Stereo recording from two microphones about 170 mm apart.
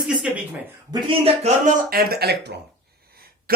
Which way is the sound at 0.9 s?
30° right (ahead or behind).